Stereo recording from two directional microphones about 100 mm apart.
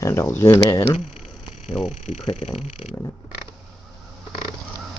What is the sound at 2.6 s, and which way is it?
Speech, 90° left.